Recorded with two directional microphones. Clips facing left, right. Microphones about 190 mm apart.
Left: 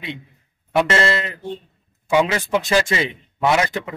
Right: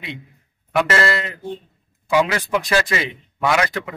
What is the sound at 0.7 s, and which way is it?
Speech, 25° left (ahead or behind).